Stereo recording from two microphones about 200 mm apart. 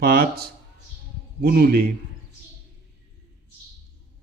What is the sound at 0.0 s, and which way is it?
Speech, 50° right (ahead or behind).